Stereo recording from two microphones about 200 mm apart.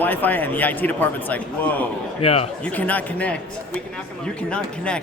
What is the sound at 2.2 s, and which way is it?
Speech, 30° left (ahead or behind).